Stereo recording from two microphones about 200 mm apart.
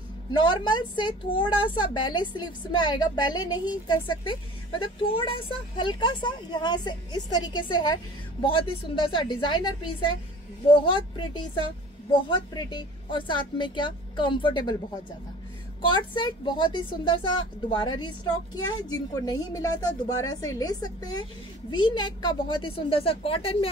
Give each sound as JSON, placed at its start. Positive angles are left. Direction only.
{"t": 0.3, "sound": "a woman's voice", "side_deg": 20}
{"t": 15.8, "sound": "a woman's voice", "side_deg": 25}